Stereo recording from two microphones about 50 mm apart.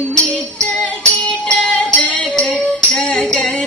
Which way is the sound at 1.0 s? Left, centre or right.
Centre.